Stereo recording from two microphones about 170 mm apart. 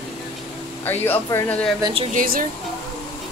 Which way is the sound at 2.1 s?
55° right (ahead or behind).